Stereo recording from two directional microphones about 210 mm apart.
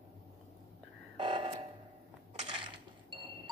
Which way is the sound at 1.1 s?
25° right (ahead or behind).